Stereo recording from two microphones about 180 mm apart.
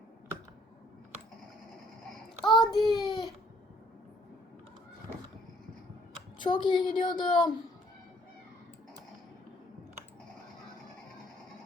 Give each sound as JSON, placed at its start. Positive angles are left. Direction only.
{"t": 2.4, "sound": "a child's voice", "side_deg": 25}
{"t": 6.4, "sound": "a woman's voice", "side_deg": 25}